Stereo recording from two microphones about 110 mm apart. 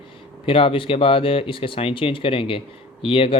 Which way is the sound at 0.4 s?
55° left (ahead or behind).